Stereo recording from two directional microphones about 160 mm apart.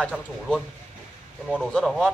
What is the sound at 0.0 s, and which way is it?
Speech, 5° left (ahead or behind).